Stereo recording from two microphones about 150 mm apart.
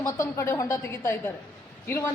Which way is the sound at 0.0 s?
20° left (ahead or behind).